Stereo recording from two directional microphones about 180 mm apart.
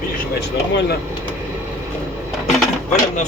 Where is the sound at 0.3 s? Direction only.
65° left (ahead or behind).